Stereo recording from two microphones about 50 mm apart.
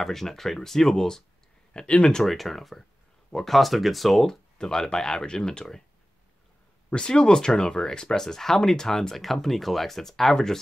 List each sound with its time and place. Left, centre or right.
0.0 s speech: centre
1.7 s speech: left
2.2 s speech: centre
6.9 s speech: centre